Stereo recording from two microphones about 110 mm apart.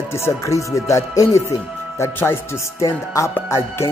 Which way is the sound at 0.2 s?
30° left (ahead or behind).